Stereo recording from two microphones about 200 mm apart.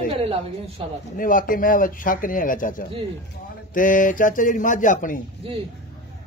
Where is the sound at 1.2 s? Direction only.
45° left (ahead or behind).